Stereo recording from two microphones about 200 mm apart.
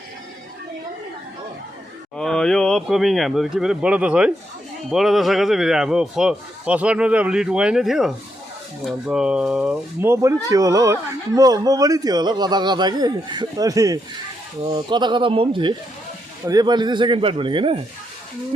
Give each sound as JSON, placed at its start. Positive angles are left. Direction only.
{"t": 2.1, "sound": "a man's voice", "side_deg": 5}